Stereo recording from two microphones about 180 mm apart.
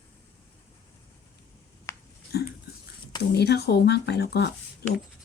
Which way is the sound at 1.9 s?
15° left (ahead or behind).